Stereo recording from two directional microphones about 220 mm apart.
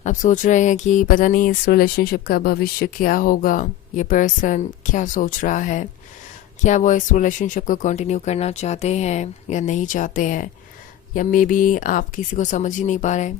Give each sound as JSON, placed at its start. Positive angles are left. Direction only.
{"t": 0.0, "sound": "speech", "side_deg": 35}